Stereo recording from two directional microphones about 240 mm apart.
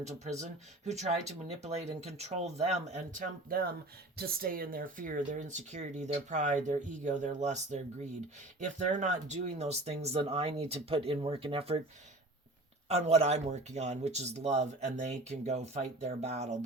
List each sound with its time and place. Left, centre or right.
0.0 s speech: right
12.9 s speech: right